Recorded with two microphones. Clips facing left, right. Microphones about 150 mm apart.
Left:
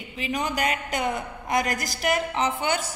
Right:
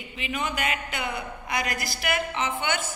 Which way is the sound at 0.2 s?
40° left (ahead or behind).